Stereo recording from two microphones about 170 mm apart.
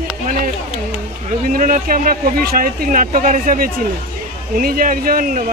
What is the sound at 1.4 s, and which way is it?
Speech, 55° right (ahead or behind).